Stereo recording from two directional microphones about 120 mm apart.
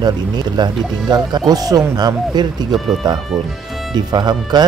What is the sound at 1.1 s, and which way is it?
Speech, 40° right (ahead or behind).